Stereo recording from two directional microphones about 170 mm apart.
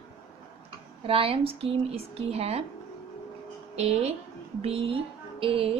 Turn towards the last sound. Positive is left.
turn(degrees=-35)  # may be behind; listen again after turning